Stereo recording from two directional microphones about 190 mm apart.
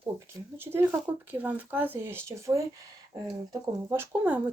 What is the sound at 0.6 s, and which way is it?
Speech, 10° right (ahead or behind).